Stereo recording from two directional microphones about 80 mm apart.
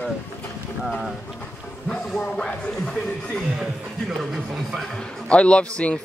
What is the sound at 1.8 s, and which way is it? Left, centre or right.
A man's voice, centre.